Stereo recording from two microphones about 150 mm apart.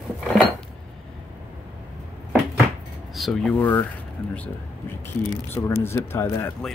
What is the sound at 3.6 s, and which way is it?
Speech, 10° left (ahead or behind).